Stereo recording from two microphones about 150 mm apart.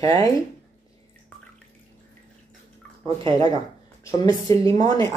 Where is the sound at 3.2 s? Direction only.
35° right (ahead or behind).